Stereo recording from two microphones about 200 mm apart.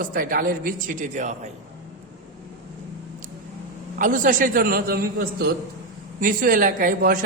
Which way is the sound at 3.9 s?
40° right (ahead or behind).